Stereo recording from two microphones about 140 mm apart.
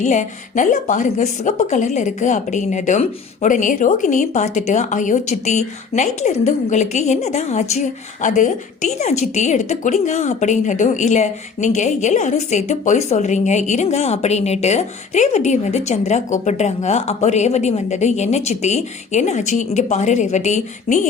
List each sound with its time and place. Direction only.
0.0 s a woman's voice: 60° left (ahead or behind)
8.2 s a woman's voice: 65° left (ahead or behind)